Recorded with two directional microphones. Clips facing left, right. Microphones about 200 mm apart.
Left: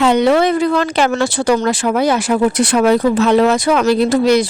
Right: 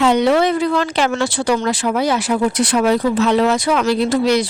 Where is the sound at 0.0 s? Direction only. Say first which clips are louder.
Left 2 dB; 55° left (ahead or behind).